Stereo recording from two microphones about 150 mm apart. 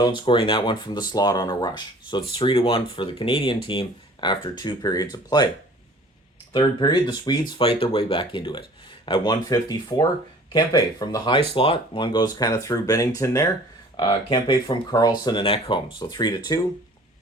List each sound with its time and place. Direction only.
0.0 s speech: 35° left (ahead or behind)
6.5 s speech: 30° left (ahead or behind)
7.6 s speech: 40° left (ahead or behind)
11.3 s speech: 40° left (ahead or behind); by 13.5 s 20° left (ahead or behind)
13.9 s speech: 30° left (ahead or behind)